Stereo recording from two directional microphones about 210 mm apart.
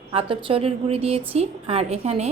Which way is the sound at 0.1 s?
25° right (ahead or behind).